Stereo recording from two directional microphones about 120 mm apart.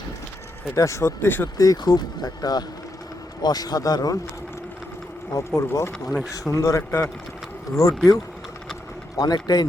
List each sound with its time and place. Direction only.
0.8 s speech: 25° left (ahead or behind)
1.5 s speech: 30° left (ahead or behind)
5.4 s speech: 25° left (ahead or behind)
6.1 s speech: centre (ahead or behind)
6.5 s speech: 25° left (ahead or behind)